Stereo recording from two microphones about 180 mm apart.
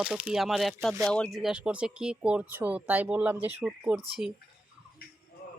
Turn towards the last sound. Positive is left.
turn(degrees=-5)  # may be behind; listen again after turning